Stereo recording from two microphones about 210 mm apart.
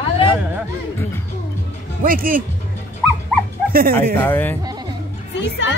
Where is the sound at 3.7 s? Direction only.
45° right (ahead or behind).